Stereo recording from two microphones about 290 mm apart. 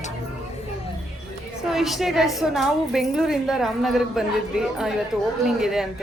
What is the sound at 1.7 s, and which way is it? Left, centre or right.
A woman's voice, centre.